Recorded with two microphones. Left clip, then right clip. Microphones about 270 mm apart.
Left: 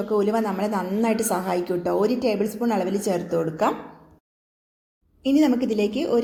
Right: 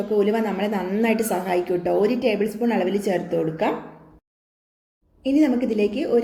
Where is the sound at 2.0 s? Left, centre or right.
Left.